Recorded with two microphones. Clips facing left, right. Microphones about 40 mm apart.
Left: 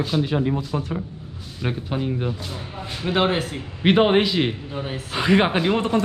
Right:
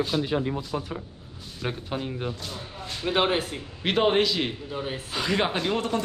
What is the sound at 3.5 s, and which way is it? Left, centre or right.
Speech, centre.